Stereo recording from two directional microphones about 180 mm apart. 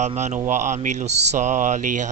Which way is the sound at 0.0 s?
40° right (ahead or behind).